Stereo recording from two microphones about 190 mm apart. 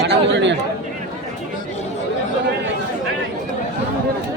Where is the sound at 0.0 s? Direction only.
65° right (ahead or behind).